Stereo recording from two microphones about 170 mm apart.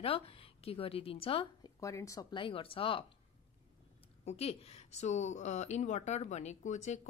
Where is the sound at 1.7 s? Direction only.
20° left (ahead or behind).